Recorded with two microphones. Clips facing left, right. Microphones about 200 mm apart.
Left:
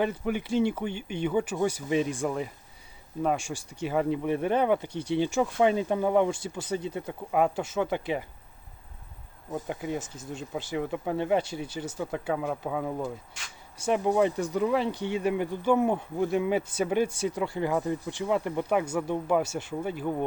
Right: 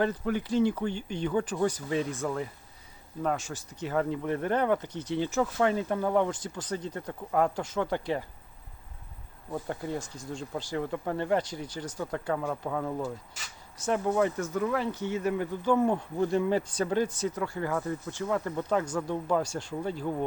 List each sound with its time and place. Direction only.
0.0 s speech: 15° left (ahead or behind)
1.2 s speech: 10° left (ahead or behind)
9.5 s speech: 15° left (ahead or behind)
10.7 s speech: 10° left (ahead or behind)